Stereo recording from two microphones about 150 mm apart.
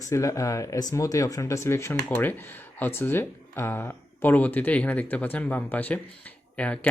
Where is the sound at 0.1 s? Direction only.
20° left (ahead or behind).